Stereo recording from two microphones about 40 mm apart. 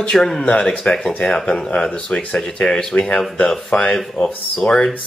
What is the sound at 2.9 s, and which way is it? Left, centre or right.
Speech, left.